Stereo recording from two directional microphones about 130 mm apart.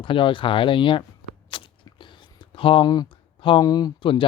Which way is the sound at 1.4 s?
40° left (ahead or behind).